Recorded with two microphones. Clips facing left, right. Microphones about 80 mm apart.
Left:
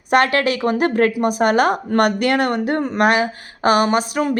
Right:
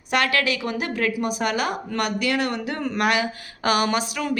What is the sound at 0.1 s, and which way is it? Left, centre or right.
A woman's voice, left.